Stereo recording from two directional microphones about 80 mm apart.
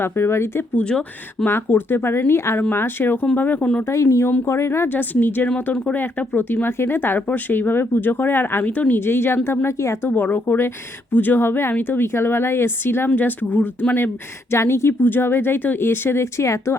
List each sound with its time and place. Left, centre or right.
0.0 s speech: left
0.8 s speech: centre
1.5 s speech: left
3.8 s speech: left
5.7 s speech: centre
6.0 s speech: left
10.1 s speech: left
14.5 s speech: left